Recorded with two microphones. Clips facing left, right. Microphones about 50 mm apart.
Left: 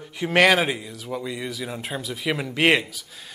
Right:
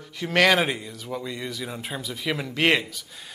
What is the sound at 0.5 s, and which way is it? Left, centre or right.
Speech, centre.